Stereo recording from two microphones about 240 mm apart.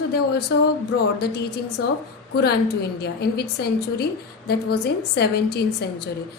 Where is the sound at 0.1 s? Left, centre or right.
Left.